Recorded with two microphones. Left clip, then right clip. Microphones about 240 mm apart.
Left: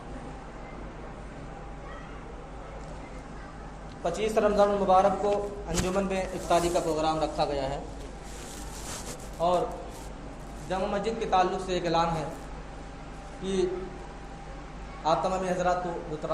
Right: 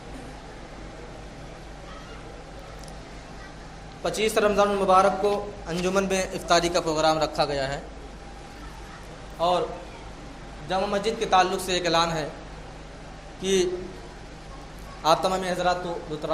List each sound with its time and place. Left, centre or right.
4.0 s a man's voice: right
9.4 s a man's voice: right
10.7 s a man's voice: right
13.4 s a man's voice: right
15.0 s a man's voice: right